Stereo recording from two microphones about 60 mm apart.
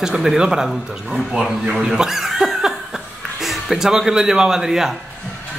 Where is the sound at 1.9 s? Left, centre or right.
Centre.